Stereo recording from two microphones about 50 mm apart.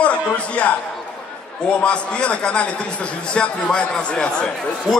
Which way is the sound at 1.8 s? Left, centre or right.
Left.